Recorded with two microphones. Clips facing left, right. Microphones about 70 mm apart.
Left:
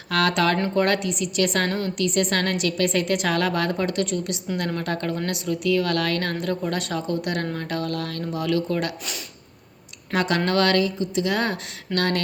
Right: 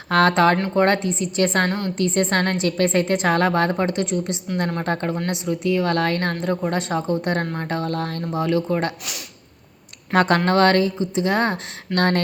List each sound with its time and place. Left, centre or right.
0.1 s a woman's voice: right
10.2 s a woman's voice: right